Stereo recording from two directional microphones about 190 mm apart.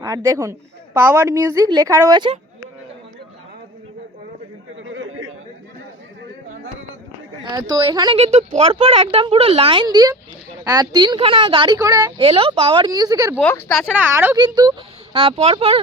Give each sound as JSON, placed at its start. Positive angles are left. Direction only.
{"t": 0.0, "sound": "speech", "side_deg": -15}
{"t": 4.8, "sound": "chatter", "side_deg": -80}
{"t": 7.5, "sound": "speech", "side_deg": -20}
{"t": 13.4, "sound": "speech", "side_deg": 10}
{"t": 13.9, "sound": "speech", "side_deg": -10}
{"t": 14.3, "sound": "speech", "side_deg": -20}